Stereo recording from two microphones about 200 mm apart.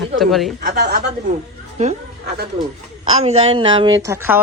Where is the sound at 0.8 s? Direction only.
55° right (ahead or behind).